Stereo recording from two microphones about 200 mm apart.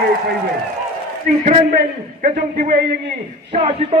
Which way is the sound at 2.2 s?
40° right (ahead or behind).